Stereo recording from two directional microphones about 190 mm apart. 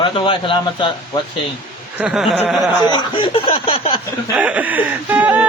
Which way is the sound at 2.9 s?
25° left (ahead or behind).